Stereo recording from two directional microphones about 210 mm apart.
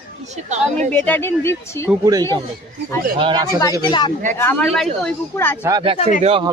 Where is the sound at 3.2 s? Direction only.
25° right (ahead or behind).